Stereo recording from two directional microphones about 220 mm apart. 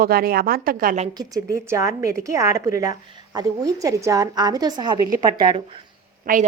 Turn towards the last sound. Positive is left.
turn(degrees=-40)  # may be behind; listen again after turning